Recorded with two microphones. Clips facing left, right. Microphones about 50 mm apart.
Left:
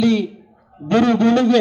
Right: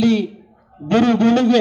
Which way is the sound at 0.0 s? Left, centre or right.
Right.